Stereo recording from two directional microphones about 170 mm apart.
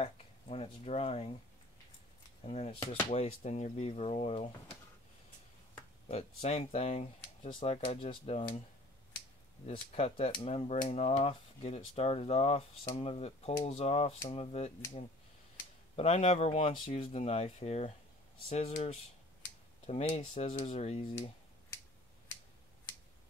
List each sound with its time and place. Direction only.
0.0 s speech: 35° left (ahead or behind)
2.4 s speech: 35° left (ahead or behind)
6.0 s speech: 40° left (ahead or behind)
9.7 s speech: 35° left (ahead or behind)